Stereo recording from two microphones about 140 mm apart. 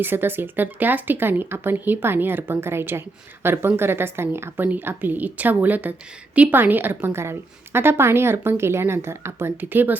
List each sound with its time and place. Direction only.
0.0 s a woman's voice: 15° right (ahead or behind)